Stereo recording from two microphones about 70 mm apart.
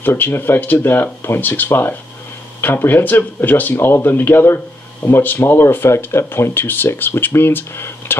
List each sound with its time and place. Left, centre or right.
0.0 s speech: left